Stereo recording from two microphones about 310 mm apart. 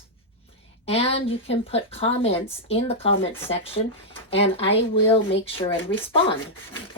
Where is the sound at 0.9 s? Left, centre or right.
Centre.